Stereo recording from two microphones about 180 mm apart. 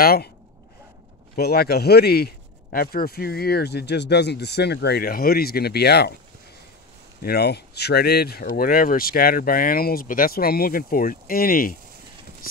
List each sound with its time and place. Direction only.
0.0 s a man's voice: 55° left (ahead or behind)
1.3 s a man's voice: 60° left (ahead or behind)
7.2 s a man's voice: 60° left (ahead or behind)